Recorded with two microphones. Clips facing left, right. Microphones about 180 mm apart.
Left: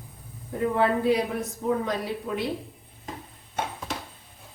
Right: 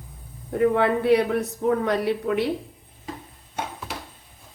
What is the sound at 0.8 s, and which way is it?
A woman's voice, 70° right (ahead or behind).